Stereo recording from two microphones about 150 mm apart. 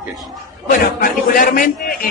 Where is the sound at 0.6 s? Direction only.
75° left (ahead or behind).